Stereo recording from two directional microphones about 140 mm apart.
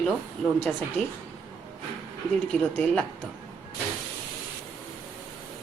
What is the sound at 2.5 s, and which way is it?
Speech, 10° left (ahead or behind).